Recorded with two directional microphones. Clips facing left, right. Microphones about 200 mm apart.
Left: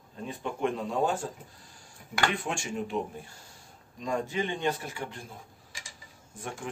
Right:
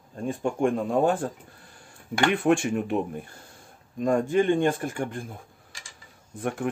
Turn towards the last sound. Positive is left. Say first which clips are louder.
# right 10 dB
turn(degrees=-60)  # may be behind; listen again after turning